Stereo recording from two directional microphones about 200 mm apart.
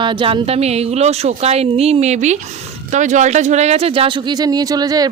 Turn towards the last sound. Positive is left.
turn(degrees=-20)  # may be behind; listen again after turning